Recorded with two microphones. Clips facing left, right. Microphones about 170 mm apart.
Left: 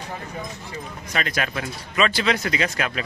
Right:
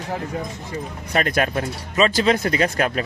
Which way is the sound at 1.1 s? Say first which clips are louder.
Right 6 dB; 45° right (ahead or behind).